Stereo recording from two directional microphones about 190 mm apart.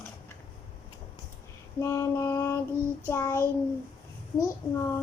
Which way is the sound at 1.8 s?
15° left (ahead or behind).